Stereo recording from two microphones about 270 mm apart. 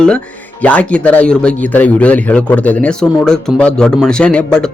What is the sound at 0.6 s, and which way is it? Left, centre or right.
Speech, centre.